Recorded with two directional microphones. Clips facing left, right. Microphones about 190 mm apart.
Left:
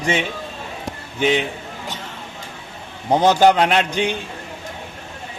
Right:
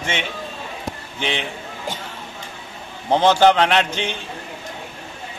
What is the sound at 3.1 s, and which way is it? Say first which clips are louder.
Speech: left 1 dB; 15° left (ahead or behind).